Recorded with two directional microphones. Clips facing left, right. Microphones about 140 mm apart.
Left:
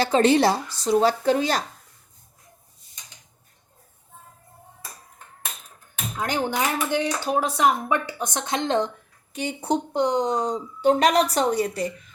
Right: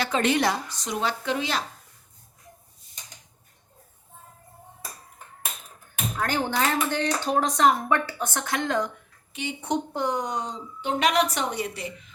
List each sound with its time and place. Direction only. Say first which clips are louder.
0.0 s a woman's voice: left 5 dB; 30° left (ahead or behind)
6.1 s speech: left 1 dB; 15° left (ahead or behind)
9.3 s a woman's voice: left 3 dB; 40° left (ahead or behind)
9.9 s a woman's voice: left 5 dB; 20° left (ahead or behind); by 12.1 s 40° left (ahead or behind)